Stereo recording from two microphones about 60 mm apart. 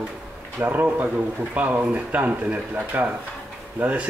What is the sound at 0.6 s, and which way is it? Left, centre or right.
Speech, right.